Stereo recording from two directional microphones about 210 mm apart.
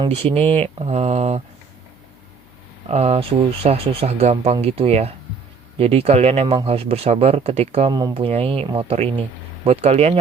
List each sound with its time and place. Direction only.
0.0 s speech: 30° right (ahead or behind)
2.9 s speech: 30° right (ahead or behind)